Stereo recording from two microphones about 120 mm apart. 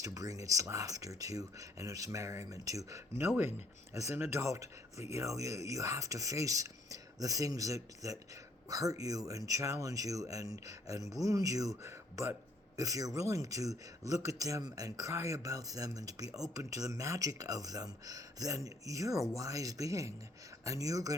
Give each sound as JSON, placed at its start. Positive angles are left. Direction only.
{"t": 0.0, "sound": "speech", "side_deg": -30}